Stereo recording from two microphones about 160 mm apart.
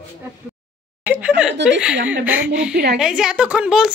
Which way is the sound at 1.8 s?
5° right (ahead or behind).